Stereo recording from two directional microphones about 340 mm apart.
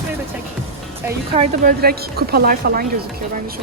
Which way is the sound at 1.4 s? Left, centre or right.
Right.